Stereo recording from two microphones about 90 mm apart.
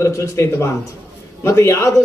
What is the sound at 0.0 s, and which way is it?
A man's voice, 35° left (ahead or behind).